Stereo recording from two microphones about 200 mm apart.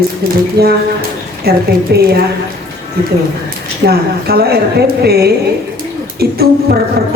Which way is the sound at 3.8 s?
50° right (ahead or behind).